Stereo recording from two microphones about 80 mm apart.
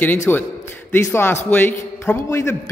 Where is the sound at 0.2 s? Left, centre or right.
Left.